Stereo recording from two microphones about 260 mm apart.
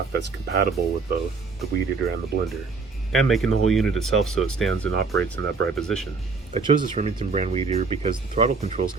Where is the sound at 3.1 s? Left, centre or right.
Centre.